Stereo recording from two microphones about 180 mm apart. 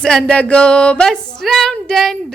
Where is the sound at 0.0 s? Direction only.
5° left (ahead or behind).